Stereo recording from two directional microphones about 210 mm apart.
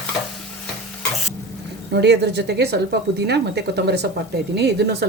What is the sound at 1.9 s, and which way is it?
A woman's voice, 55° right (ahead or behind).